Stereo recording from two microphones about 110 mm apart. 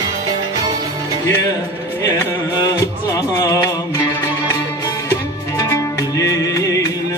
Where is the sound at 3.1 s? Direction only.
35° left (ahead or behind).